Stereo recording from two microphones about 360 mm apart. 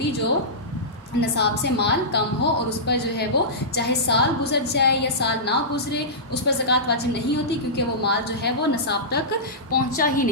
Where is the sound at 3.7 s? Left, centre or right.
Left.